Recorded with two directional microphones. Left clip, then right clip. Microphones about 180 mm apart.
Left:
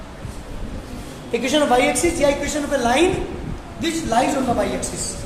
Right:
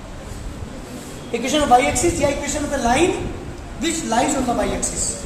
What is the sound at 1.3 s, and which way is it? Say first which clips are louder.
A woman's voice: right 2 dB; 15° left (ahead or behind).